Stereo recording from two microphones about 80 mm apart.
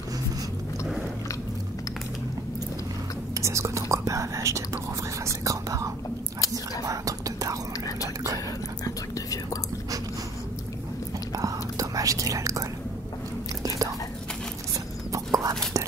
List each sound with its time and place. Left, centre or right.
3.3 s speech: right
5.2 s whispering: right
8.8 s whispering: left
11.3 s whispering: right
15.1 s whispering: right